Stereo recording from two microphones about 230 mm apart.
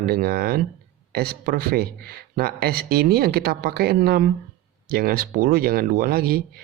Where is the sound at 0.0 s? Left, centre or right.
Right.